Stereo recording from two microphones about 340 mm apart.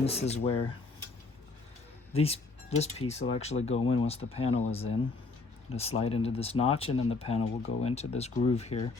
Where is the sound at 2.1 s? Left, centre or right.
Centre.